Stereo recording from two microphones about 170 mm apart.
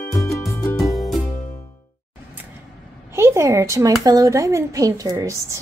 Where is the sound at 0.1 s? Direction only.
15° left (ahead or behind).